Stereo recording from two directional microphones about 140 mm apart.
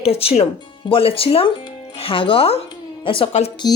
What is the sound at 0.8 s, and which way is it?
Speech, 40° left (ahead or behind).